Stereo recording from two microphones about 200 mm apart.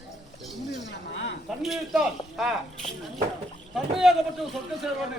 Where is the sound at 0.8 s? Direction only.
60° left (ahead or behind).